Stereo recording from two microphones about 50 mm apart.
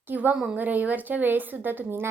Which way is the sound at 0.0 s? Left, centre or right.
Right.